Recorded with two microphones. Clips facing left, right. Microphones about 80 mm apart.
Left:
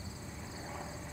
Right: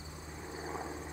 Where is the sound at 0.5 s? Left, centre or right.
Right.